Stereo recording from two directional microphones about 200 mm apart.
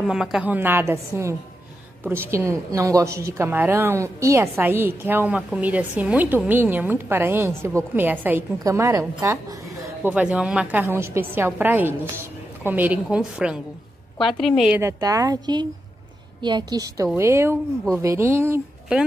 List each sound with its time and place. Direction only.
0.0 s a woman's voice: 5° right (ahead or behind)
14.8 s a woman's voice: 15° right (ahead or behind)